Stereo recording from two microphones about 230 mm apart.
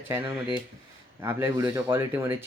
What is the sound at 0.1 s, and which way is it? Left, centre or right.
Speech, centre.